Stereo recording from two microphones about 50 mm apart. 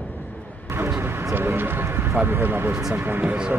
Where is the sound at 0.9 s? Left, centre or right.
Right.